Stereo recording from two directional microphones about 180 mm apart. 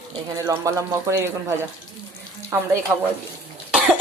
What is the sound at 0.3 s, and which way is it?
Speech, 20° right (ahead or behind).